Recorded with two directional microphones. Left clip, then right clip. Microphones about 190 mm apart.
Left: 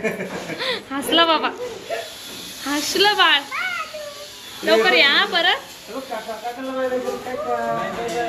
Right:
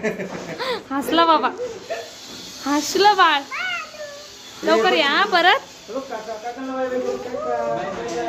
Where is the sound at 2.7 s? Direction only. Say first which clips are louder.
Right 2 dB; 30° right (ahead or behind).